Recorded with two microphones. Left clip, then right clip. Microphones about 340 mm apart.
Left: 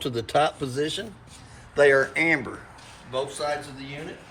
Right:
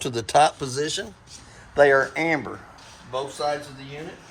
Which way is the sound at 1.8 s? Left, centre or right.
Right.